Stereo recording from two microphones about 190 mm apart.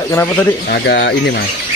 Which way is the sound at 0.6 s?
60° left (ahead or behind).